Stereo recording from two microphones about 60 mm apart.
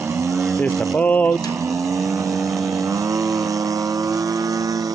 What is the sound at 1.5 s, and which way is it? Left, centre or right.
Vehicle, right.